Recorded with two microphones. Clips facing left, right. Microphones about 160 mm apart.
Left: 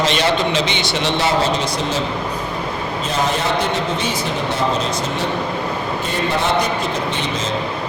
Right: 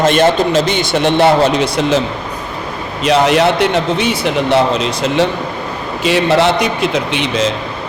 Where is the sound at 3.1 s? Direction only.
75° right (ahead or behind).